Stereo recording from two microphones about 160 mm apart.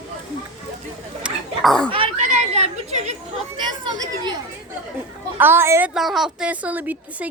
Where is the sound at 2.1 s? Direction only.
45° right (ahead or behind).